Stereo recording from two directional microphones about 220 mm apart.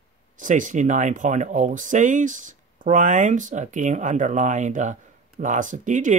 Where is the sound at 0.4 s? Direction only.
35° right (ahead or behind).